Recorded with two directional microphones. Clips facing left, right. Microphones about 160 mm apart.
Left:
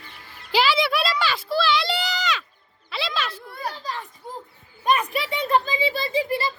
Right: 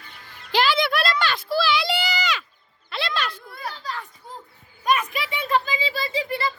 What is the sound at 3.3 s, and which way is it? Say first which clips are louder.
Children playing: left 3 dB; 35° left (ahead or behind).